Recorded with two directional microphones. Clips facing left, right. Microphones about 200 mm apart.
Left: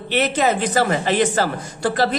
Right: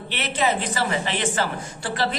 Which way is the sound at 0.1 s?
45° left (ahead or behind).